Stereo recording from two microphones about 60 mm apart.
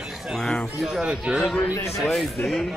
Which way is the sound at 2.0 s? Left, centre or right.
Centre.